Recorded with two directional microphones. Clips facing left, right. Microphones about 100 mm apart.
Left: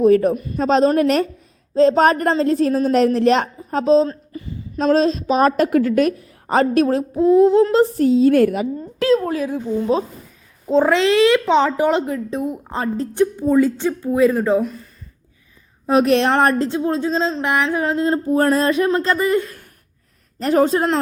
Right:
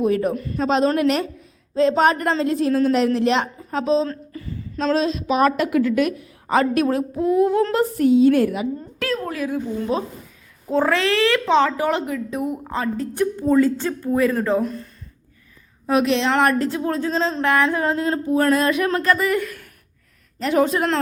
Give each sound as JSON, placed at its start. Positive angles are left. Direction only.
{"t": 0.0, "sound": "a woman's voice", "side_deg": 40}
{"t": 0.3, "sound": "speech", "side_deg": 20}
{"t": 0.6, "sound": "a woman's voice", "side_deg": 40}
{"t": 4.0, "sound": "a sound", "side_deg": 25}
{"t": 4.9, "sound": "a woman's voice", "side_deg": 40}
{"t": 8.3, "sound": "a woman's voice", "side_deg": 50}
{"t": 9.0, "sound": "a woman's voice", "side_deg": 20}
{"t": 13.3, "sound": "speech", "side_deg": 15}
{"t": 14.6, "sound": "speech", "side_deg": 5}
{"t": 16.0, "sound": "a woman's voice", "side_deg": 55}
{"t": 16.3, "sound": "a woman's voice", "side_deg": 30}